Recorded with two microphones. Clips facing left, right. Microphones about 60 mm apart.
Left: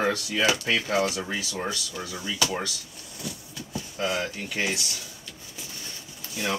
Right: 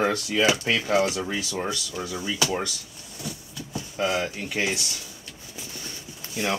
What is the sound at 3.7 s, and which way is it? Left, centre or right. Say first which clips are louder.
Speech: right 3 dB; centre.